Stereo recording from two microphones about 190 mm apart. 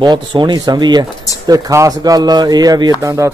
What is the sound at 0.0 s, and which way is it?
A man's voice, 25° right (ahead or behind).